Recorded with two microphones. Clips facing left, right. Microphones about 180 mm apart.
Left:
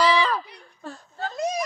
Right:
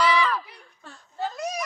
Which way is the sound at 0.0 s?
35° left (ahead or behind).